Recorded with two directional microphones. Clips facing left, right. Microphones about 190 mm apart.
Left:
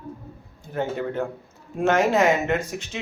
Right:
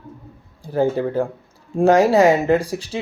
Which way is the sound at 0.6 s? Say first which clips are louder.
Right 8 dB; 35° right (ahead or behind).